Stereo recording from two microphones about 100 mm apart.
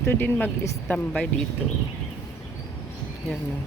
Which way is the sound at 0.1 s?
20° left (ahead or behind).